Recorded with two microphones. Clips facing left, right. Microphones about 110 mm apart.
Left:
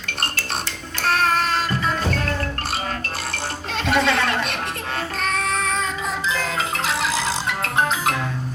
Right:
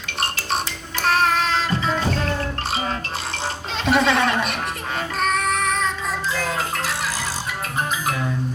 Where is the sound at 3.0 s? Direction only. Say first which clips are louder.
Right 1 dB; 50° left (ahead or behind).